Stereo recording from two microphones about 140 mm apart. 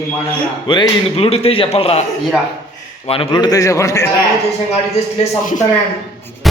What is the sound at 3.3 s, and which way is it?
Speech, 30° left (ahead or behind).